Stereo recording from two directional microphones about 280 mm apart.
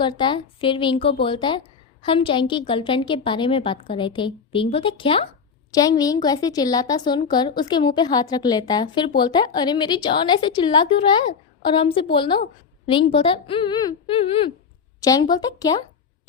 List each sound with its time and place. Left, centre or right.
0.0 s a woman's voice: centre